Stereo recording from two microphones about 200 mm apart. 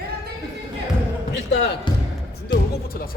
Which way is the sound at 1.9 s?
20° left (ahead or behind).